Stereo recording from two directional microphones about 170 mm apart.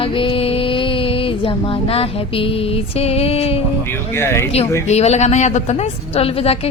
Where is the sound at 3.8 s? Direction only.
15° left (ahead or behind).